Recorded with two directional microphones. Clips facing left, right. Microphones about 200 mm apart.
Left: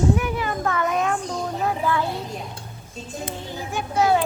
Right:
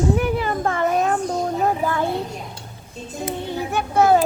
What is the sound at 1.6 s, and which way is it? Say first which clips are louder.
Child singing: even; 45° right (ahead or behind).